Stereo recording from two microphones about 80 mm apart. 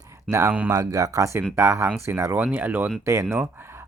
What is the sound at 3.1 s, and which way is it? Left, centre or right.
Speech, right.